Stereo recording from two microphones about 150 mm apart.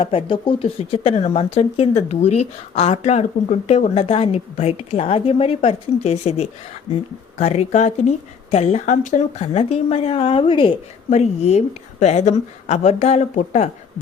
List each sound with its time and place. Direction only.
0.0 s speech: 35° left (ahead or behind)